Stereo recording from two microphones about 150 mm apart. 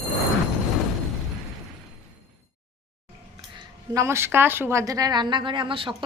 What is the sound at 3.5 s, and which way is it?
A woman's voice, 20° right (ahead or behind).